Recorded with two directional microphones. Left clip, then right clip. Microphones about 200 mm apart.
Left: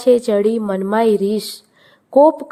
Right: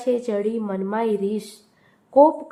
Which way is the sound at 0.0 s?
40° left (ahead or behind).